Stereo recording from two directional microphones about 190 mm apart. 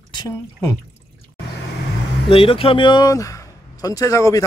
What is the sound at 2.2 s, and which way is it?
Speech, 30° left (ahead or behind).